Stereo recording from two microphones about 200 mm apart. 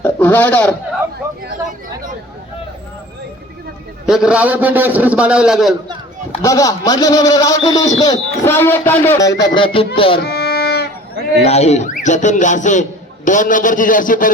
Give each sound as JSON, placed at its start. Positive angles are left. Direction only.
{"t": 0.0, "sound": "a sound", "side_deg": 10}
{"t": 4.0, "sound": "a man's voice", "side_deg": -5}
{"t": 6.4, "sound": "speech", "side_deg": 15}
{"t": 9.4, "sound": "speech", "side_deg": 25}
{"t": 10.2, "sound": "music", "side_deg": 55}
{"t": 11.4, "sound": "speech", "side_deg": 35}